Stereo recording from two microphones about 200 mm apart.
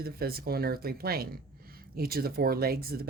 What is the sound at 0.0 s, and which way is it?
Speech, 50° right (ahead or behind).